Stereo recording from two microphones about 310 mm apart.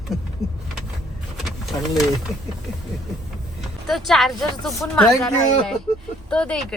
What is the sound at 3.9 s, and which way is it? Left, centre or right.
Speech, centre.